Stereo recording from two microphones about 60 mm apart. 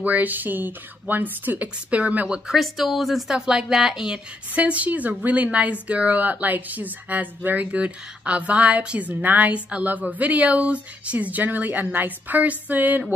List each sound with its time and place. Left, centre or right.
0.0 s speech: right
2.4 s a woman's voice: centre
4.6 s speech: right